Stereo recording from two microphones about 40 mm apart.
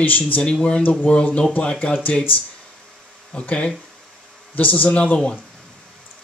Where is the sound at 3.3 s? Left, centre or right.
Left.